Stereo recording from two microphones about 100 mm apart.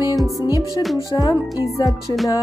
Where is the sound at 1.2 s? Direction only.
35° left (ahead or behind).